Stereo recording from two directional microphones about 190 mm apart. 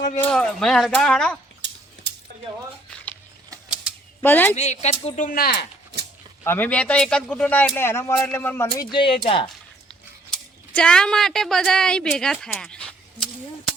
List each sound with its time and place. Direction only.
0.2 s speech: 5° left (ahead or behind)
1.6 s a sound: 70° right (ahead or behind)
4.2 s a man's voice: 10° left (ahead or behind)
4.5 s speech: 35° left (ahead or behind); by 5.6 s 50° left (ahead or behind)
6.4 s a man's voice: 10° left (ahead or behind); by 9.5 s 30° left (ahead or behind)
10.8 s speech: 5° left (ahead or behind)